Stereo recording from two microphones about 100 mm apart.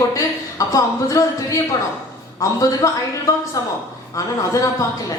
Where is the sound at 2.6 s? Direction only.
35° left (ahead or behind).